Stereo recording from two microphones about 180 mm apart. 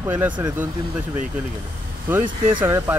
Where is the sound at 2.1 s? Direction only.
10° right (ahead or behind).